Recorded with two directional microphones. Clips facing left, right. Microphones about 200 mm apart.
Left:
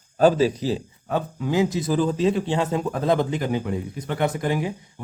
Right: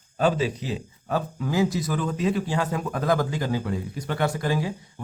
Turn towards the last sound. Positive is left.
turn(degrees=20)  # may be behind; listen again after turning